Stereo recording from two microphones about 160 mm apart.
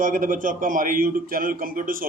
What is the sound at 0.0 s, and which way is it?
A man's voice, 55° right (ahead or behind).